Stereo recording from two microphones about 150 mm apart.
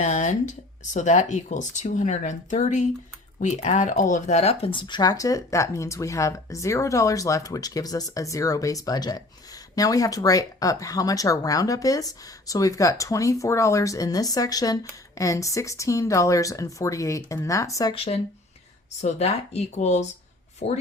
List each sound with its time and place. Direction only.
0.0 s speech: 50° left (ahead or behind); by 17.9 s 20° left (ahead or behind)
17.9 s speech: 40° left (ahead or behind)